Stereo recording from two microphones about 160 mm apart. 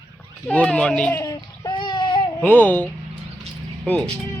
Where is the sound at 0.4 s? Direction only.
5° left (ahead or behind).